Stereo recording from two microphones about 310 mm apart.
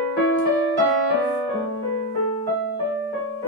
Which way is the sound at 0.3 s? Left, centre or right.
Left.